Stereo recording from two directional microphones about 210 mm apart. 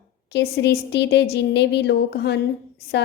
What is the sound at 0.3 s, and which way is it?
A woman's voice, 55° left (ahead or behind).